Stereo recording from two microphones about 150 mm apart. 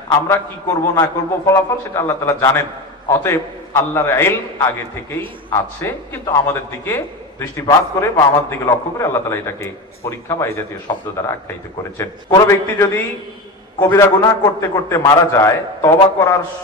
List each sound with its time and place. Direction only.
0.9 s a man's voice: 20° left (ahead or behind)
11.2 s speech: 30° left (ahead or behind)
12.4 s a man's voice: 15° left (ahead or behind)